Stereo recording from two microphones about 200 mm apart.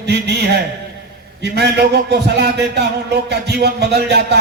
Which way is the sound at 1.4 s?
55° right (ahead or behind).